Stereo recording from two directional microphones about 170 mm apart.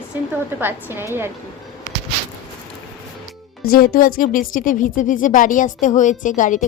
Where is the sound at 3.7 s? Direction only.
60° left (ahead or behind).